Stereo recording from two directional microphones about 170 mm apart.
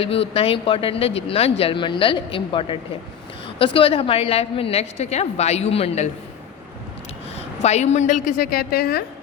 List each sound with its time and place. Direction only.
0.0 s speech: 35° left (ahead or behind)
7.3 s a woman's voice: 40° left (ahead or behind); by 9.0 s 65° left (ahead or behind)